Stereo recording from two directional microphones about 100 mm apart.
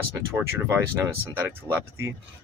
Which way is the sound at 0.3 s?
20° right (ahead or behind).